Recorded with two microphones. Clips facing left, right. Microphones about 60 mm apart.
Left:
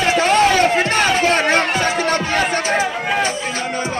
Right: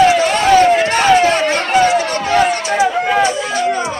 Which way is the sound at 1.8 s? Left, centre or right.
Left.